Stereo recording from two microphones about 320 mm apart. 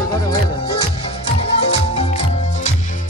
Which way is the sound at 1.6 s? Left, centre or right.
Centre.